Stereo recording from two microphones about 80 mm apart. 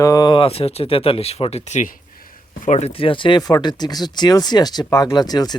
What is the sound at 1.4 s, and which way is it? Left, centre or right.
Speech, left.